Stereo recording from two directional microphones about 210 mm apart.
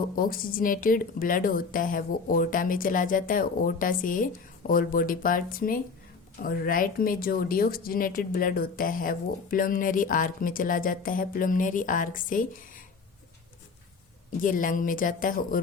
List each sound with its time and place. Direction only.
0.2 s speech: 40° left (ahead or behind)
14.4 s speech: 40° left (ahead or behind)